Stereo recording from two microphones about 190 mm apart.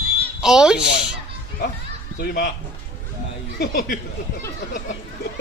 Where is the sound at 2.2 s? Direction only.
50° left (ahead or behind).